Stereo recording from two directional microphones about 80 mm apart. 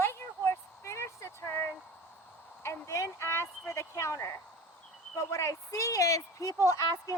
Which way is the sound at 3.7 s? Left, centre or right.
Left.